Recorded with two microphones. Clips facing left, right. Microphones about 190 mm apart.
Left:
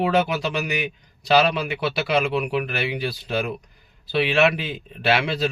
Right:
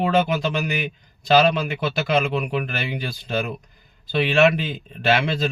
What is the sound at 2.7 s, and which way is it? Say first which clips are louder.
Speech: left 2 dB; 45° right (ahead or behind).